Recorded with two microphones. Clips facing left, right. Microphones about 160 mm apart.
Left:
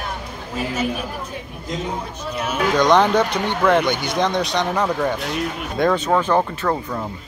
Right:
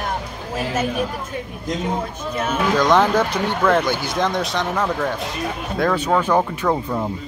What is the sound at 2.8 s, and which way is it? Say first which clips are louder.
Speech: left 2 dB; 5° right (ahead or behind).